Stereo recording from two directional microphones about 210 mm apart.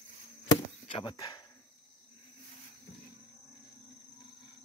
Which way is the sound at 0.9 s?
20° left (ahead or behind).